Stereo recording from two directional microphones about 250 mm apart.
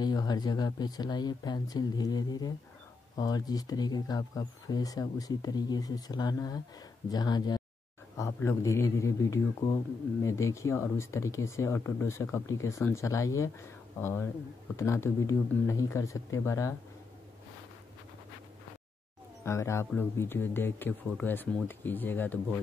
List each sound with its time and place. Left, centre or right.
0.0 s speech: centre
19.4 s speech: centre